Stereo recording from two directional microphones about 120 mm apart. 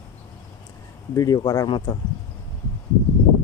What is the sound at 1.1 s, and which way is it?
Speech, 30° left (ahead or behind).